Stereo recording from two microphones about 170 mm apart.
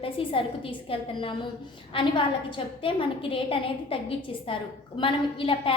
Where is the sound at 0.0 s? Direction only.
30° left (ahead or behind).